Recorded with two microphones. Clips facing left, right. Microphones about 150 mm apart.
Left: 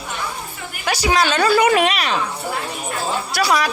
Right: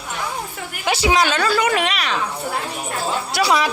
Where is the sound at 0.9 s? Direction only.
25° right (ahead or behind).